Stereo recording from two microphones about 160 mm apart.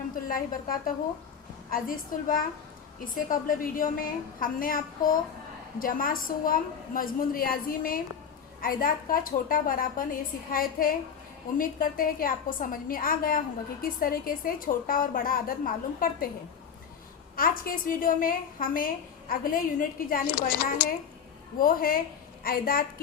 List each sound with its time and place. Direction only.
0.3 s a woman's voice: 60° left (ahead or behind)
17.3 s a woman's voice: 65° left (ahead or behind)